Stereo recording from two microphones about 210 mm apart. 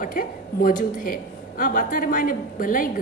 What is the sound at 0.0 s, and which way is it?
A woman's voice, 40° left (ahead or behind).